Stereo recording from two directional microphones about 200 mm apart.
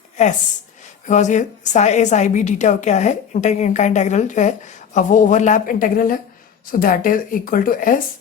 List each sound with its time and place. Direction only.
1.0 s a woman's voice: 35° left (ahead or behind)